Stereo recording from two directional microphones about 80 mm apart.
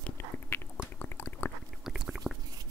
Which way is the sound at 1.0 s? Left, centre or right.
Left.